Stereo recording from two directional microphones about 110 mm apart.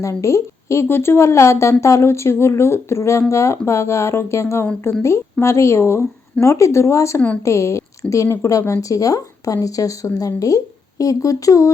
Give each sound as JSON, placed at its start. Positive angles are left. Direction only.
{"t": 0.0, "sound": "speech", "side_deg": 30}